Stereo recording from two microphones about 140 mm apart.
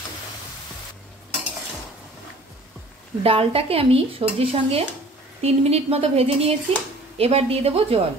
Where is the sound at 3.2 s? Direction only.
45° right (ahead or behind).